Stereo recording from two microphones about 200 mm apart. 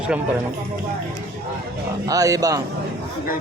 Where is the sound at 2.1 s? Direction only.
15° right (ahead or behind).